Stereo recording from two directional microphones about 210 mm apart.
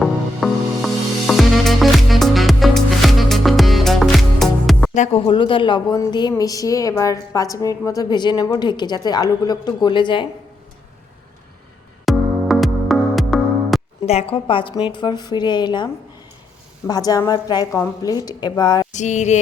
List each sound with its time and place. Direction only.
0.0 s music: centre (ahead or behind)
4.9 s a woman's voice: 25° left (ahead or behind)
12.0 s music: centre (ahead or behind)
14.1 s a woman's voice: 30° left (ahead or behind)
18.9 s a sound: 35° left (ahead or behind)